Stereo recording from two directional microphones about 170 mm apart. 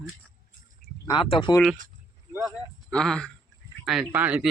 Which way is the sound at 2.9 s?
5° left (ahead or behind).